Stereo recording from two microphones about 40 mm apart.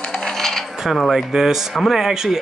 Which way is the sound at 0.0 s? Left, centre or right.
Centre.